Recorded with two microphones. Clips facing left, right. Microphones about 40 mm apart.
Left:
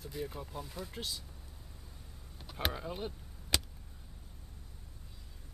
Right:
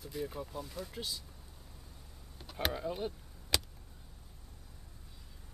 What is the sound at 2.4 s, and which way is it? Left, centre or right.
Power windows, centre.